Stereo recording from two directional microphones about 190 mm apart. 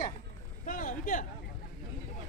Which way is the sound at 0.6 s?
45° left (ahead or behind).